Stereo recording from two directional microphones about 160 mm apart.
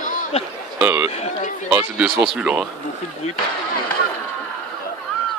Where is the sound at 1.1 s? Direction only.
45° left (ahead or behind).